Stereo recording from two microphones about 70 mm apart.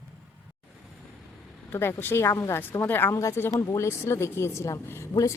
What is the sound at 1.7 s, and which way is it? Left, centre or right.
Speech, left.